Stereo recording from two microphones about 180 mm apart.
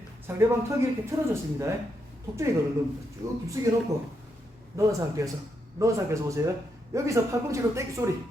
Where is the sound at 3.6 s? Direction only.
20° right (ahead or behind).